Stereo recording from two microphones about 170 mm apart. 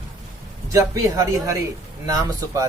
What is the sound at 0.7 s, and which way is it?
Speech, 20° right (ahead or behind).